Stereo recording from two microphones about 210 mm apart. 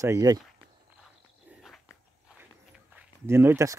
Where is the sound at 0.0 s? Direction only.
15° right (ahead or behind).